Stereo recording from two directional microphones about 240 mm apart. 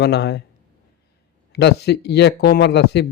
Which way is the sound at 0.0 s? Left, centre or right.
Left.